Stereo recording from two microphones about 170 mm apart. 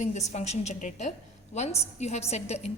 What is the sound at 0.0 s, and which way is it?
A woman's voice, 45° left (ahead or behind).